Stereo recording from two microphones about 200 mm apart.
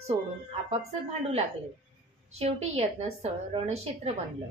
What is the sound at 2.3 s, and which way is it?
A woman's voice, 30° right (ahead or behind).